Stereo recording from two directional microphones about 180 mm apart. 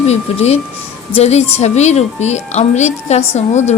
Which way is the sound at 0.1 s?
35° left (ahead or behind).